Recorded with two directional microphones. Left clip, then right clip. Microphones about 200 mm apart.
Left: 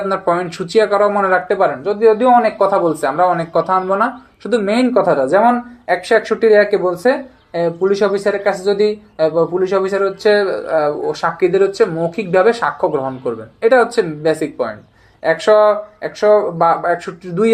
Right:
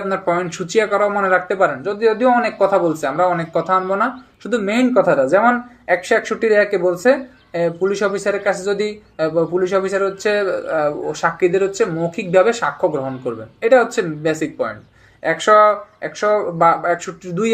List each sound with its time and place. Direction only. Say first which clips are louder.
0.1 s speech: left 1 dB; 15° left (ahead or behind)